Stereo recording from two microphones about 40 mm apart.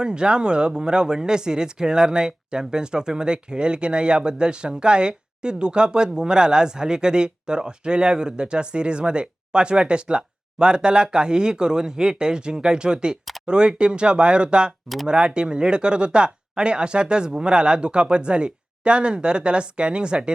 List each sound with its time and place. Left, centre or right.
0.0 s speech: right